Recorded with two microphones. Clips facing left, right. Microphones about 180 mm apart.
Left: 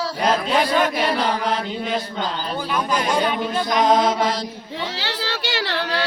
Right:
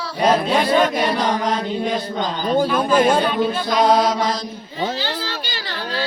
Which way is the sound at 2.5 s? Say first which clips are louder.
Right 9 dB; 50° right (ahead or behind).